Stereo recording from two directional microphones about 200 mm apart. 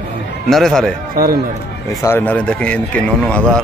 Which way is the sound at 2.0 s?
10° left (ahead or behind).